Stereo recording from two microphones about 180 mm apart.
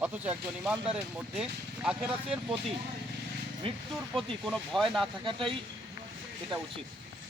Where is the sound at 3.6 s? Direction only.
30° right (ahead or behind).